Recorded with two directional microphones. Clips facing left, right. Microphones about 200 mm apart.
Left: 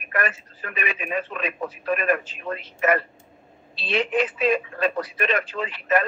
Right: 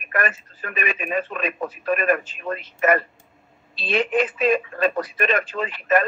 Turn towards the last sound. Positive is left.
turn(degrees=-50)  # may be behind; listen again after turning